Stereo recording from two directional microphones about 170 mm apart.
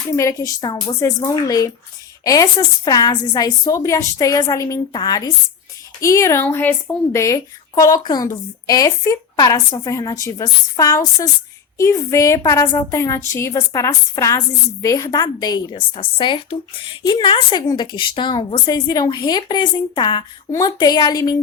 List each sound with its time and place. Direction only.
0.2 s a woman's voice: 20° left (ahead or behind)